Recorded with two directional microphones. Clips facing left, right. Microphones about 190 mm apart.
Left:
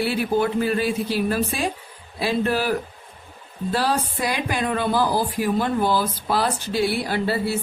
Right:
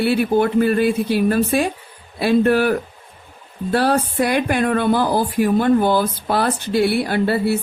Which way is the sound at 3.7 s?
60° right (ahead or behind).